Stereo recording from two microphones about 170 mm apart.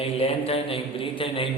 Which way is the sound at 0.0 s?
35° left (ahead or behind).